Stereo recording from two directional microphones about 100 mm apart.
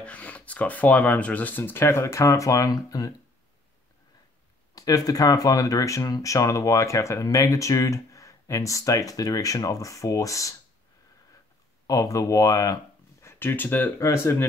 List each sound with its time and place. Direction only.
0.0 s speech: 15° left (ahead or behind); by 3.2 s 35° left (ahead or behind)
4.7 s speech: 40° left (ahead or behind)
11.9 s speech: 35° left (ahead or behind)
13.3 s speech: 20° left (ahead or behind)
13.9 s speech: 30° left (ahead or behind)